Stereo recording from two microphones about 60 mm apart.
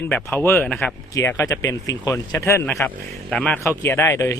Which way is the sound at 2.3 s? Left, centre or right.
Left.